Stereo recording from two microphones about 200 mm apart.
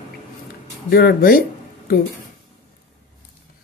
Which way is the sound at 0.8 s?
50° left (ahead or behind).